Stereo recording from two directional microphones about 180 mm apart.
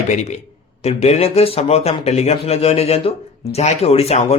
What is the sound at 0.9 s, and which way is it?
A man's voice, 35° left (ahead or behind).